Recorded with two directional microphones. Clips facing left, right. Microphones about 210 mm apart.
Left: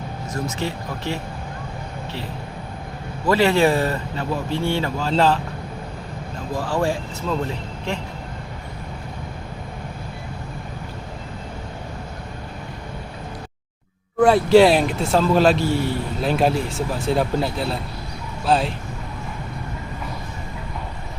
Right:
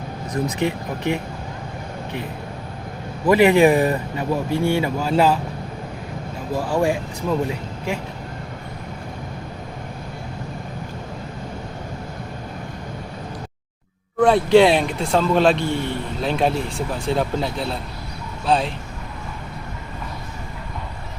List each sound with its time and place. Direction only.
0.4 s speech: 15° right (ahead or behind)
3.2 s speech: 15° right (ahead or behind)
6.6 s speech: 15° right (ahead or behind)
14.2 s speech: centre (ahead or behind)